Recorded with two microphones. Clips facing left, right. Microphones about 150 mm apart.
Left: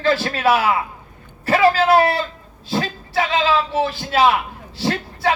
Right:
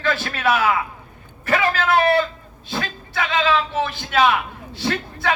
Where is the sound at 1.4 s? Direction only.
35° left (ahead or behind).